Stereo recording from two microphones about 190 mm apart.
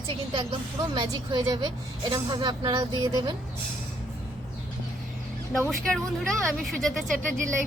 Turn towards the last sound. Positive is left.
turn(degrees=0)  # may be behind; listen again after turning